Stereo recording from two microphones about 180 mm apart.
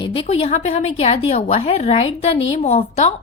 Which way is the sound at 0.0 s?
30° left (ahead or behind).